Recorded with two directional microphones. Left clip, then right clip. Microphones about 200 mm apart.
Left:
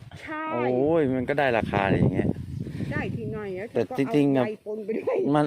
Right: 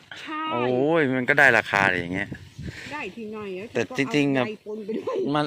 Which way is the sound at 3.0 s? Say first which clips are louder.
Left 3 dB; 40° right (ahead or behind).